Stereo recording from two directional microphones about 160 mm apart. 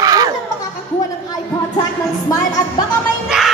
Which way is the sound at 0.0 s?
25° right (ahead or behind).